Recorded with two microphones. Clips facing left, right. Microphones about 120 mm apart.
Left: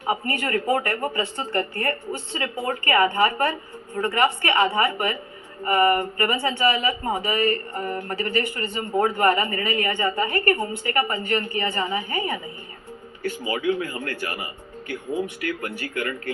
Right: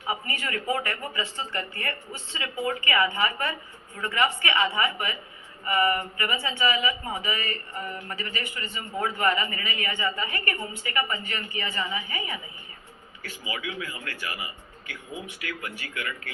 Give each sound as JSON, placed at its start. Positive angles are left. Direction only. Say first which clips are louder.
{"t": 0.0, "sound": "speech", "louder": "left 6 dB", "side_deg": 35}
{"t": 9.0, "sound": "speech", "louder": "left 3 dB", "side_deg": 45}